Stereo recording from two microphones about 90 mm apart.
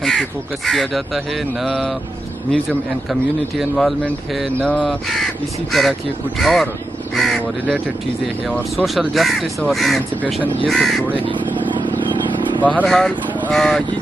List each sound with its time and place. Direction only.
0.0 s speech: centre (ahead or behind)
3.1 s speech: centre (ahead or behind)
4.5 s speech: 15° left (ahead or behind)
4.8 s speech: centre (ahead or behind)
8.7 s speech: centre (ahead or behind)
11.2 s vehicle: 65° right (ahead or behind)
12.8 s speech: 5° left (ahead or behind)